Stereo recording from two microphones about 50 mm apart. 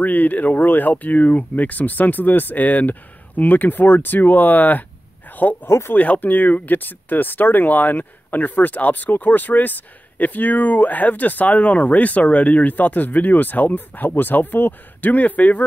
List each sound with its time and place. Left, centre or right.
0.0 s speech: left